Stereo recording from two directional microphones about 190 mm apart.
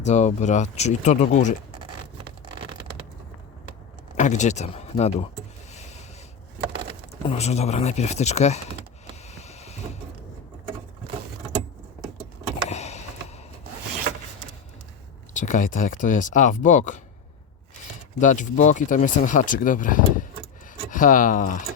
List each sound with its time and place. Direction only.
0.0 s speech: 35° left (ahead or behind)
4.2 s speech: 40° left (ahead or behind)
5.7 s a sound: 35° left (ahead or behind)
7.3 s speech: 35° left (ahead or behind)
9.3 s vehicle: 35° left (ahead or behind)
12.6 s a sound: 35° left (ahead or behind)
15.3 s speech: 40° left (ahead or behind)
18.2 s speech: 40° left (ahead or behind)